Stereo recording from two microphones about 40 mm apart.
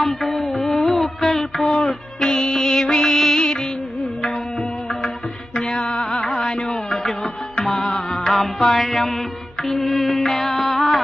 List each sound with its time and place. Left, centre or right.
0.0 s music: centre
1.3 s a sound: centre
1.8 s music: centre
3.3 s music of bollywood: centre
5.5 s music: centre
5.8 s music: left
8.3 s music: centre